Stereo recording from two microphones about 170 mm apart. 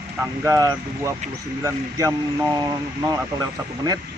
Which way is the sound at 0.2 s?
15° right (ahead or behind).